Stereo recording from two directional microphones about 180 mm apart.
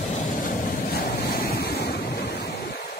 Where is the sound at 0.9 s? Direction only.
55° left (ahead or behind).